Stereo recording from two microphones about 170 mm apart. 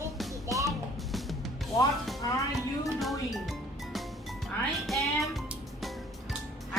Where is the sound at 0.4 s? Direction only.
20° right (ahead or behind).